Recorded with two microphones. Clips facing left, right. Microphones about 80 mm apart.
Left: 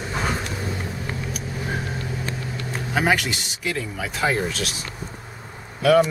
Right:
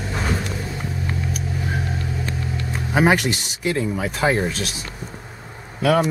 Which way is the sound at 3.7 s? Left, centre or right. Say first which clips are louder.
Right 6 dB; right.